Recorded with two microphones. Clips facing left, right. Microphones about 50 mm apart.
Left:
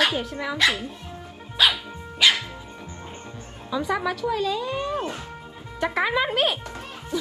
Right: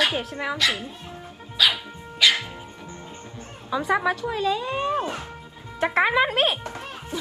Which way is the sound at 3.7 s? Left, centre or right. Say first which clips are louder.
Right 3 dB; right.